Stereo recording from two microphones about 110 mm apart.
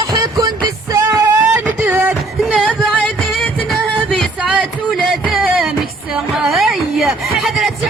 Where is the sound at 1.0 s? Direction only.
20° right (ahead or behind).